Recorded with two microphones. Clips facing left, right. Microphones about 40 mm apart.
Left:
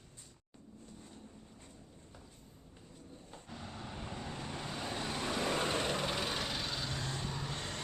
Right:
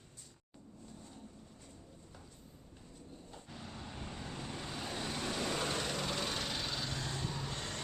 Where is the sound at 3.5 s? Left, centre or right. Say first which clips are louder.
Left 2 dB; centre.